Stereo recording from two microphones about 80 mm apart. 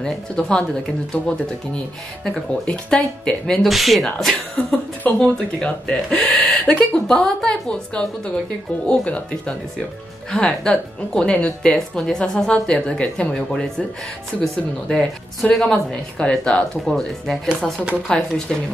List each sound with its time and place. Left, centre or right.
0.0 s speech: centre
2.2 s speech: centre
6.6 s speech: centre
7.1 s speech: centre